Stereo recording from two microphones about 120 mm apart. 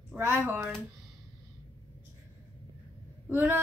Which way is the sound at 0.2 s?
15° right (ahead or behind).